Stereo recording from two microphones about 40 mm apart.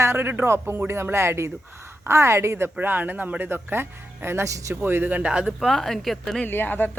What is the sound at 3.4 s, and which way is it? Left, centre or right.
A man's voice, right.